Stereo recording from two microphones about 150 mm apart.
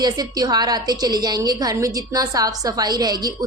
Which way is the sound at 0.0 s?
25° right (ahead or behind).